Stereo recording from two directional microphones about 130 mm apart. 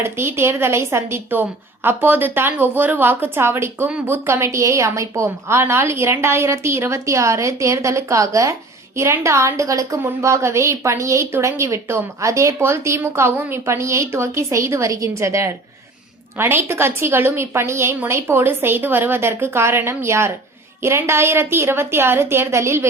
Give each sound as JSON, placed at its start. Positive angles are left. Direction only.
{"t": 0.0, "sound": "a woman's voice", "side_deg": -20}